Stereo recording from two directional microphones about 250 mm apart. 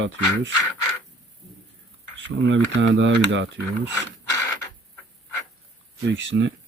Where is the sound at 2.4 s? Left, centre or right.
Right.